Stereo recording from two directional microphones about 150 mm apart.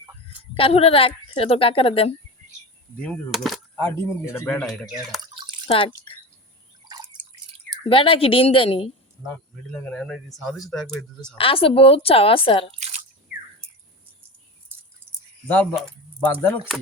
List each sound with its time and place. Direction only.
0.5 s a woman's voice: 40° left (ahead or behind)
3.0 s speech: 5° left (ahead or behind)
3.8 s speech: 15° left (ahead or behind)
4.4 s speech: 5° left (ahead or behind)
5.3 s drip: 35° right (ahead or behind)
5.6 s speech: 35° left (ahead or behind)
6.8 s drip: 30° right (ahead or behind)
7.9 s a woman's voice: 35° left (ahead or behind)
9.7 s speech: 5° left (ahead or behind)
11.3 s a woman's voice: 35° left (ahead or behind)
16.2 s speech: 10° left (ahead or behind)